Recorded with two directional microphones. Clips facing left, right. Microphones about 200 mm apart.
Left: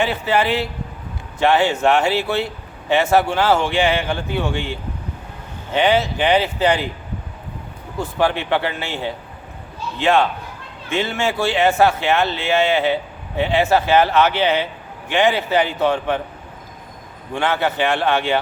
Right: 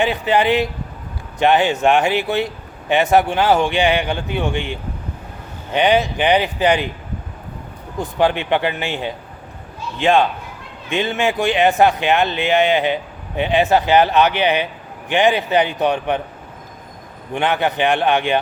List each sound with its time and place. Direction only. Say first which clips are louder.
0.0 s speech: right 2 dB; 15° right (ahead or behind)
7.9 s speech: right 2 dB; 20° right (ahead or behind)
17.3 s speech: right 1 dB; 20° right (ahead or behind)